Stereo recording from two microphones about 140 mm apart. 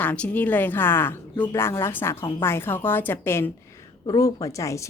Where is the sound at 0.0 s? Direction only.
10° left (ahead or behind).